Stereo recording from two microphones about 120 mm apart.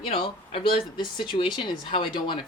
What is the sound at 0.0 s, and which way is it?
Speech, 50° left (ahead or behind).